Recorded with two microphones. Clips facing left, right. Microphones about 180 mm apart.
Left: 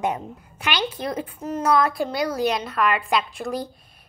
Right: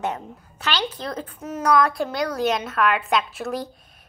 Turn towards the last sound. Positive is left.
turn(degrees=0)  # may be behind; listen again after turning